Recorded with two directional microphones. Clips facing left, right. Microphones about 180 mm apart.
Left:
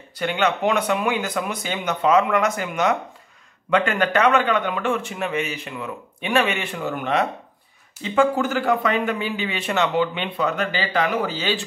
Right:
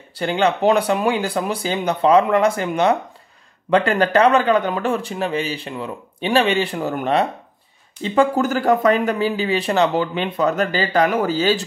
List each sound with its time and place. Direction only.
0.1 s speech: 30° right (ahead or behind)